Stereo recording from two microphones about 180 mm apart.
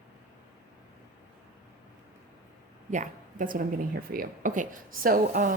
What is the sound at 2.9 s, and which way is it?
A woman's voice, 45° right (ahead or behind).